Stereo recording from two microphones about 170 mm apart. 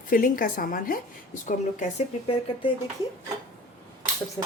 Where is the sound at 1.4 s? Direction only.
40° left (ahead or behind).